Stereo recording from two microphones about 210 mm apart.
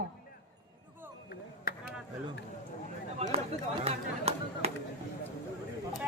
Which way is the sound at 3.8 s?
30° right (ahead or behind).